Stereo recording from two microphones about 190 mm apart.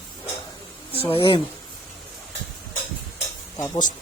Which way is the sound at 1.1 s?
25° left (ahead or behind).